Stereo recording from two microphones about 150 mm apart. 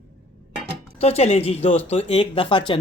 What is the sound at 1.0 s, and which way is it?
Speech, 45° left (ahead or behind).